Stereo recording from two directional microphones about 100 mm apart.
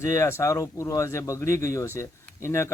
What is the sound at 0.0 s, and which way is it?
Speech, 30° left (ahead or behind).